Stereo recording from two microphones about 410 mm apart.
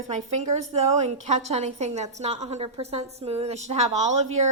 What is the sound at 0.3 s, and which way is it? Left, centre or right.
A woman's voice, centre.